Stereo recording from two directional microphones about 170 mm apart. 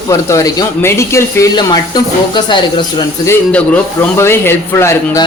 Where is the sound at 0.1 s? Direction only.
20° left (ahead or behind).